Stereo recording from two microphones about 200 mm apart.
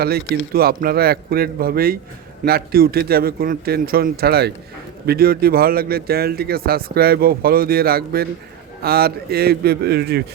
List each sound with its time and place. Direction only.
0.5 s a man's voice: 50° right (ahead or behind)